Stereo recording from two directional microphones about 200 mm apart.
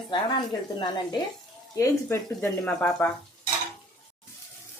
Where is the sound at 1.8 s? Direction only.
10° left (ahead or behind).